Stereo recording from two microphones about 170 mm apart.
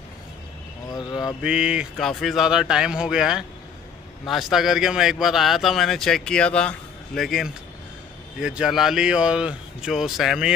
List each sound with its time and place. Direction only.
0.9 s speech: 25° left (ahead or behind)
1.4 s a man's voice: 5° right (ahead or behind)